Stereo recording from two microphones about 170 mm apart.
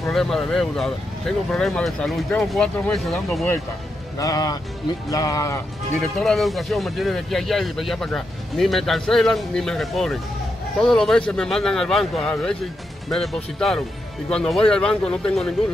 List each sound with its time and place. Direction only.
0.1 s speech: centre (ahead or behind)
4.2 s speech: 20° left (ahead or behind)
5.9 s speech: centre (ahead or behind)